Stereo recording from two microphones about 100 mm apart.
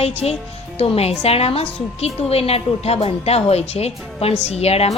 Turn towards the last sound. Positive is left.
turn(degrees=90)